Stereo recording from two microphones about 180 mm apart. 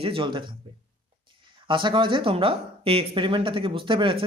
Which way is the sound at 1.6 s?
25° right (ahead or behind).